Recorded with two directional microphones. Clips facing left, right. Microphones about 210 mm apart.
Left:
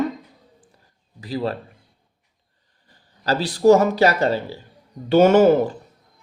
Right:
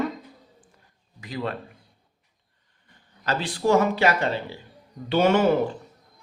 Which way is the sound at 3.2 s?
35° left (ahead or behind).